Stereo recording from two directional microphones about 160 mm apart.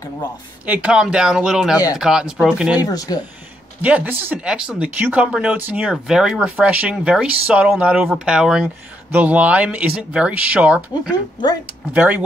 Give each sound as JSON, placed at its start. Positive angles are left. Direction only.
{"t": 0.7, "sound": "speech", "side_deg": -5}
{"t": 2.8, "sound": "speech", "side_deg": 25}
{"t": 3.8, "sound": "speech", "side_deg": -10}